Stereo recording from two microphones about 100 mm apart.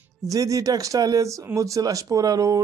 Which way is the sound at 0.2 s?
35° right (ahead or behind).